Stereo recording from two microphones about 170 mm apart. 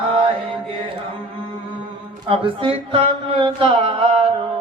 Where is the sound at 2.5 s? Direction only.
30° right (ahead or behind).